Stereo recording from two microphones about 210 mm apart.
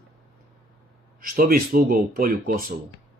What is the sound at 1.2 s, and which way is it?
Speech, 45° right (ahead or behind).